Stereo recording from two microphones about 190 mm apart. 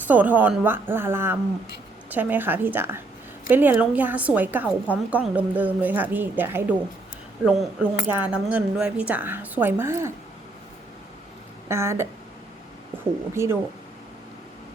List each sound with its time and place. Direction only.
0.1 s a woman's voice: 10° right (ahead or behind)
11.7 s a woman's voice: 15° right (ahead or behind)
13.3 s a woman's voice: 15° right (ahead or behind)